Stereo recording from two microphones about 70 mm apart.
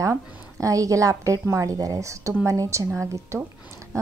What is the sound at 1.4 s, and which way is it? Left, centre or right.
Speech, right.